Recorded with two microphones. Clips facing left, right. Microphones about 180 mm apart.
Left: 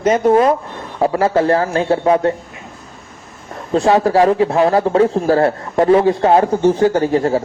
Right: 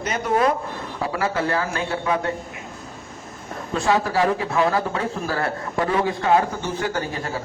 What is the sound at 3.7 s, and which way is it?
A man's voice, 30° left (ahead or behind).